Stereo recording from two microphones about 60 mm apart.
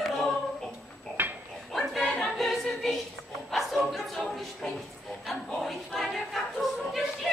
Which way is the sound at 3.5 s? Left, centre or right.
Centre.